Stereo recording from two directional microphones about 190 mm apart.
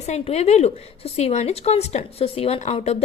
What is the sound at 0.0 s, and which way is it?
A woman's voice, 35° left (ahead or behind).